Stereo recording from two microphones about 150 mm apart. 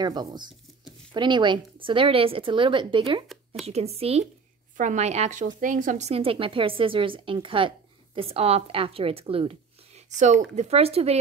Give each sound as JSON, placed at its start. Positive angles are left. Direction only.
{"t": 0.0, "sound": "a woman's voice", "side_deg": -30}
{"t": 4.7, "sound": "speech", "side_deg": -55}